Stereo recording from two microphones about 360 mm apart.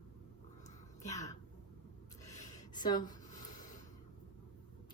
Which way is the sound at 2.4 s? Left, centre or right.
Centre.